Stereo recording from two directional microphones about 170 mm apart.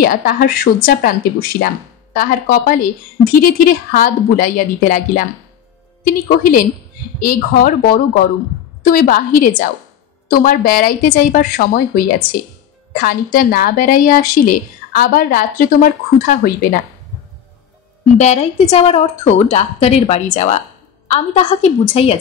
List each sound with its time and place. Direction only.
0.0 s a woman's voice: 60° left (ahead or behind)
2.1 s a woman's voice: 55° left (ahead or behind)
18.1 s a woman's voice: 40° left (ahead or behind)